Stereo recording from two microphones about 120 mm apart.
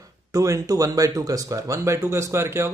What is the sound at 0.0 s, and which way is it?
Speech, 30° right (ahead or behind).